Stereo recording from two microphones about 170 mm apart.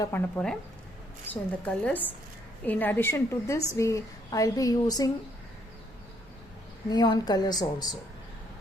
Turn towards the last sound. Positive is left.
turn(degrees=25)  # may be behind; listen again after turning